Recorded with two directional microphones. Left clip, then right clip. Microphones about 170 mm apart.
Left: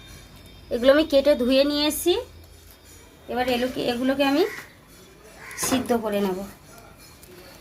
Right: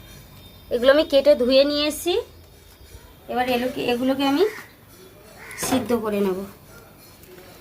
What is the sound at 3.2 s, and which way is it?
Speech, 15° left (ahead or behind).